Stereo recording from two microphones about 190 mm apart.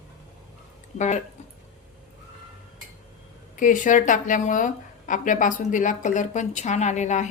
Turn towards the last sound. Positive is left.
turn(degrees=40)  # may be behind; listen again after turning